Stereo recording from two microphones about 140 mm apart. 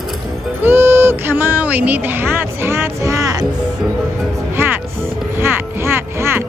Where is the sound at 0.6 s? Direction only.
15° right (ahead or behind).